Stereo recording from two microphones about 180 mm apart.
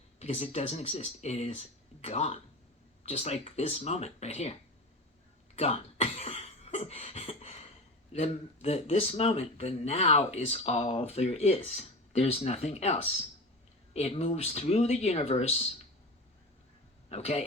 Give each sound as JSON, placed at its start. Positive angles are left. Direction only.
{"t": 0.2, "sound": "speech", "side_deg": 35}
{"t": 5.5, "sound": "cough", "side_deg": 35}
{"t": 8.1, "sound": "speech", "side_deg": 35}
{"t": 17.1, "sound": "speech", "side_deg": 35}